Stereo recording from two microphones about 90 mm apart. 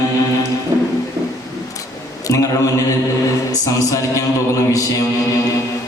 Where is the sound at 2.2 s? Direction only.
40° left (ahead or behind).